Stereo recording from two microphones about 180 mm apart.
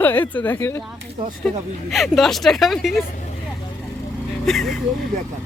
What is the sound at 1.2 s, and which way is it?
Speech, 30° right (ahead or behind).